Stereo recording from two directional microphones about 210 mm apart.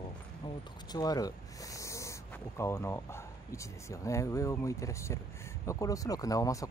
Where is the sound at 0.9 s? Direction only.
20° left (ahead or behind).